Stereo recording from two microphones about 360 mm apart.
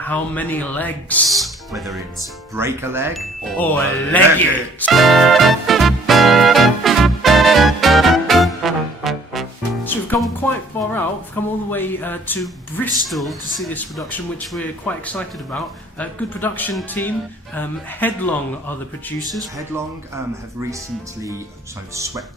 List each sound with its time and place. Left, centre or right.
0.0 s speech: centre
4.1 s music: centre
10.8 s speech: centre
21.9 s speech: centre